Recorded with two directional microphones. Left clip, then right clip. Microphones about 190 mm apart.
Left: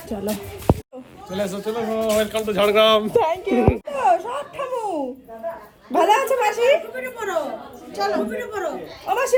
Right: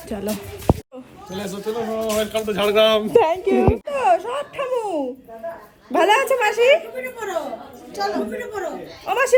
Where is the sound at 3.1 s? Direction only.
55° right (ahead or behind).